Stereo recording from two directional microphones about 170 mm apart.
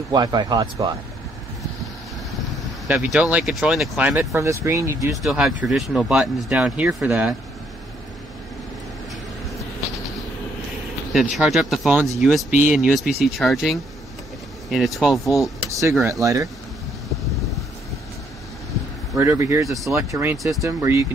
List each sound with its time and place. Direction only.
0.1 s speech: 25° right (ahead or behind)
2.5 s speech: 5° right (ahead or behind)
5.1 s speech: centre (ahead or behind)
11.1 s speech: centre (ahead or behind)
15.7 s speech: 20° right (ahead or behind)
19.1 s speech: 15° right (ahead or behind)